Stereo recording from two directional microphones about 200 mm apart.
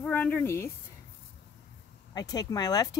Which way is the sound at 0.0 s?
10° left (ahead or behind).